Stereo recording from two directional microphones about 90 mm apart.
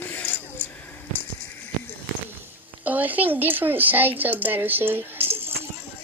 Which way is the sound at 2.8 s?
20° right (ahead or behind).